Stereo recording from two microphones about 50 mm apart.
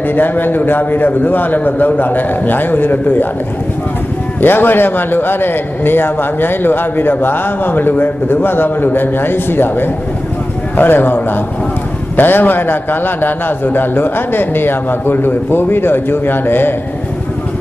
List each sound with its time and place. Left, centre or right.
0.1 s a man's voice: left
4.4 s a man's voice: left
12.2 s a man's voice: left